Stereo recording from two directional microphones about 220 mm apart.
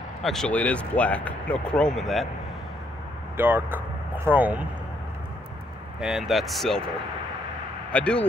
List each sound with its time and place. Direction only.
0.2 s speech: centre (ahead or behind)
3.3 s speech: 10° right (ahead or behind)
5.9 s speech: centre (ahead or behind)
7.9 s speech: 5° left (ahead or behind)